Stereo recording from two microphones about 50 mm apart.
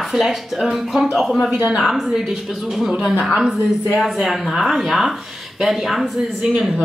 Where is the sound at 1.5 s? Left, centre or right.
Right.